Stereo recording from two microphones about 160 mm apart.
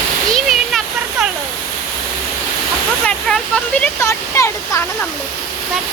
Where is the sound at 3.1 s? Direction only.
5° left (ahead or behind).